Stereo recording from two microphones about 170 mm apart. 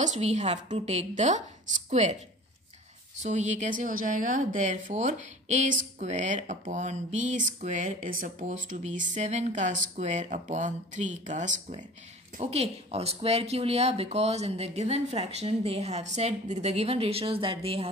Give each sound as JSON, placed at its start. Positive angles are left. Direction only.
{"t": 0.0, "sound": "speech", "side_deg": -45}
{"t": 3.2, "sound": "speech", "side_deg": -45}